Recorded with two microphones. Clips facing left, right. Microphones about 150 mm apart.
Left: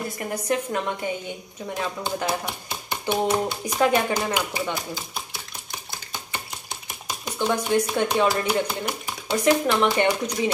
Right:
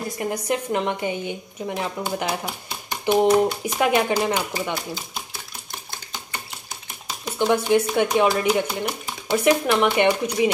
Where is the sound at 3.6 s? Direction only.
35° left (ahead or behind).